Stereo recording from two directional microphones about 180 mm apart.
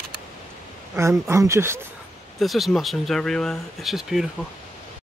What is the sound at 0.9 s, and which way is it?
Speech, 15° right (ahead or behind).